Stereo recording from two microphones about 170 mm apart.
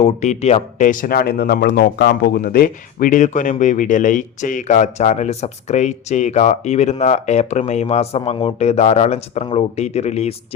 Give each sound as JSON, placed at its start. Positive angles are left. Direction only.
{"t": 0.0, "sound": "speech", "side_deg": 40}